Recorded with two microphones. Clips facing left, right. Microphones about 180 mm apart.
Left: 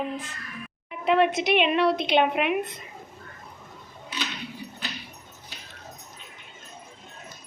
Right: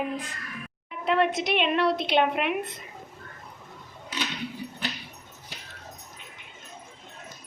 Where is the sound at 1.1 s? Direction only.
Centre (ahead or behind).